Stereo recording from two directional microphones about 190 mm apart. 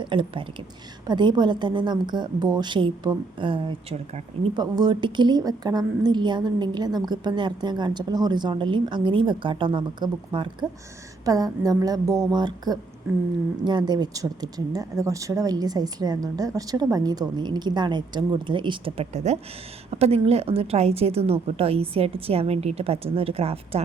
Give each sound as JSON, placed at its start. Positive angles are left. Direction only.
{"t": 0.0, "sound": "a woman's voice", "side_deg": -25}